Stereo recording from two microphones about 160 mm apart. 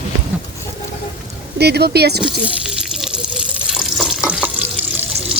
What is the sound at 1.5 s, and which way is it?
Speech, 90° right.